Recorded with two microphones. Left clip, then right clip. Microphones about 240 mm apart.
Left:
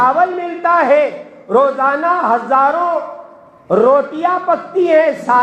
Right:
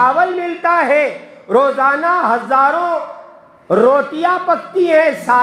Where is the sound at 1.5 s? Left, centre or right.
Right.